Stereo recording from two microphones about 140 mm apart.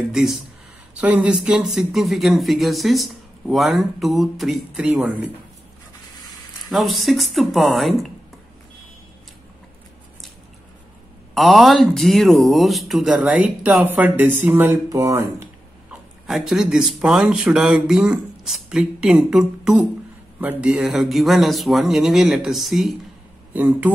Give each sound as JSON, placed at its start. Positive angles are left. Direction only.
{"t": 0.1, "sound": "speech", "side_deg": -5}
{"t": 6.7, "sound": "speech", "side_deg": 0}
{"t": 11.3, "sound": "speech", "side_deg": 0}
{"t": 15.9, "sound": "speech", "side_deg": 0}
{"t": 23.5, "sound": "speech", "side_deg": -10}